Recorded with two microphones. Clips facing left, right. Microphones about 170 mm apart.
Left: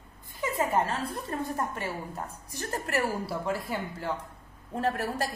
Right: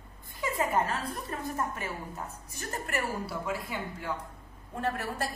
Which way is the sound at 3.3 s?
Centre (ahead or behind).